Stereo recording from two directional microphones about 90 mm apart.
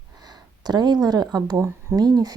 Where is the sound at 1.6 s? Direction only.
30° right (ahead or behind).